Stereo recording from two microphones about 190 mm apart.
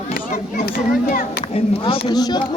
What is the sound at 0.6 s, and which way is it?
Speech, 50° left (ahead or behind).